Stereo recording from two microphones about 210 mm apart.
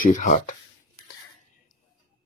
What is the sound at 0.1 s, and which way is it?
Speech, 35° left (ahead or behind).